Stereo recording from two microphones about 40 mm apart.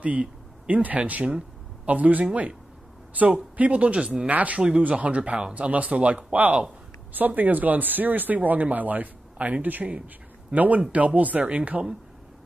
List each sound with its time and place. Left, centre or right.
0.0 s a sound: right
0.8 s speech: right
4.3 s speech: right
4.6 s speech: right